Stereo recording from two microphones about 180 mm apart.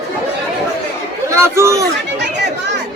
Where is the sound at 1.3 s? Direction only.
15° right (ahead or behind).